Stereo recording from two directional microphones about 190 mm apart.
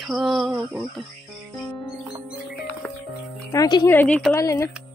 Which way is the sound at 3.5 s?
20° left (ahead or behind).